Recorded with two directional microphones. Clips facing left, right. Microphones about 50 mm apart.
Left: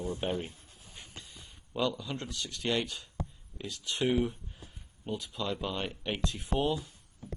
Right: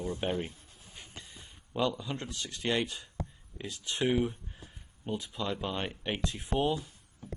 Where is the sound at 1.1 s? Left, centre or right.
Right.